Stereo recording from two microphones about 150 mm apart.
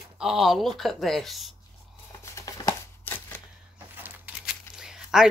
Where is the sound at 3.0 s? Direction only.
10° left (ahead or behind).